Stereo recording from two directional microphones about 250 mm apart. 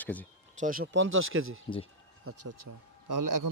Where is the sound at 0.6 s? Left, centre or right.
Right.